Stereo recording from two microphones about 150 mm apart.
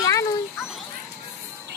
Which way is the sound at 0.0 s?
20° left (ahead or behind).